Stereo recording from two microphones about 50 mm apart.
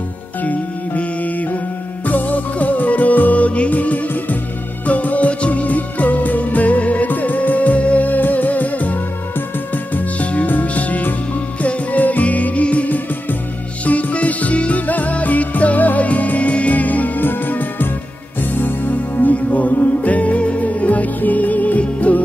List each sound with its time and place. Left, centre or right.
0.4 s music: left
9.9 s music: left